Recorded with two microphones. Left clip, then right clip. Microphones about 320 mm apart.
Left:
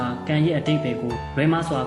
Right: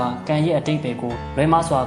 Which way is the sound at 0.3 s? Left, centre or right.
Centre.